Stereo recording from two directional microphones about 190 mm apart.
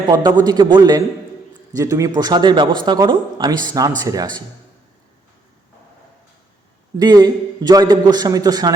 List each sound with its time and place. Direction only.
0.1 s speech: 20° right (ahead or behind)
6.9 s speech: 20° right (ahead or behind)